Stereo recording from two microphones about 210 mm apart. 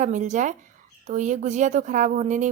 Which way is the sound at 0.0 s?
35° right (ahead or behind).